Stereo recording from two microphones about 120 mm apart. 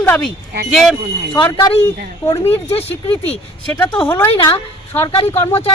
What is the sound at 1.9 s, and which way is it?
Speech, 20° left (ahead or behind).